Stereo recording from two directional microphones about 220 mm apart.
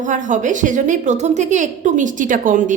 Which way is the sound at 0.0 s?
35° right (ahead or behind).